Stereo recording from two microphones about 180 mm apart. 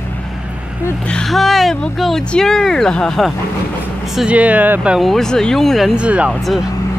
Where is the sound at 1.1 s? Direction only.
Centre (ahead or behind).